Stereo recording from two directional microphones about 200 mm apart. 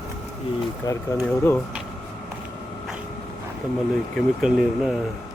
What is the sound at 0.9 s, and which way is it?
Speech, 20° left (ahead or behind).